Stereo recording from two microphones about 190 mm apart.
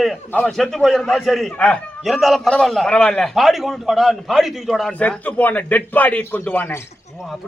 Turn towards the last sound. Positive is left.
turn(degrees=10)  # may be behind; listen again after turning